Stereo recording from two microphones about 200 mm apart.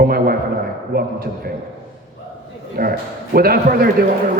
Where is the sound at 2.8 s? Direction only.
45° right (ahead or behind).